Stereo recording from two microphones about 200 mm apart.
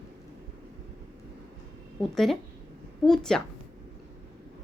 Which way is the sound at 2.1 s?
Centre (ahead or behind).